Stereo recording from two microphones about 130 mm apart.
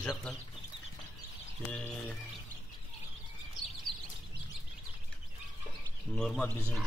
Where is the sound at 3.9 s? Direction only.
Centre (ahead or behind).